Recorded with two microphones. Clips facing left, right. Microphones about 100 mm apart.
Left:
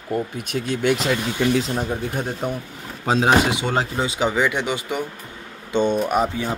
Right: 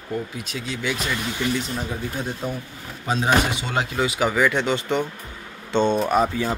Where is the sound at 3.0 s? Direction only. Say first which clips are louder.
Left 4 dB; 85° left.